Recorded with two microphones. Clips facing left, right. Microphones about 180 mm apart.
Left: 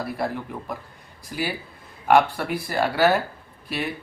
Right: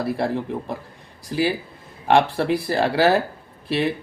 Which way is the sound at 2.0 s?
30° right (ahead or behind).